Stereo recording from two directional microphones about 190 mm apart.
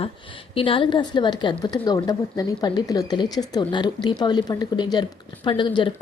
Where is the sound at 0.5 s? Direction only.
30° left (ahead or behind).